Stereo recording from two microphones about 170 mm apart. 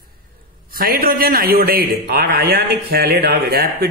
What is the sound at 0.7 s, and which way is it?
A man's voice, 60° right (ahead or behind).